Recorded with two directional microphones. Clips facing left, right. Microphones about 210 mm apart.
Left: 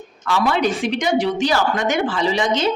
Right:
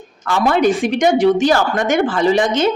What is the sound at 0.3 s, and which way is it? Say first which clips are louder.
A woman's voice: right 4 dB; 45° right (ahead or behind).